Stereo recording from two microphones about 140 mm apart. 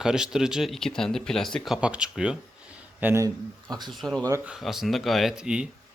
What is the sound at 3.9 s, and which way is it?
Speech, centre (ahead or behind).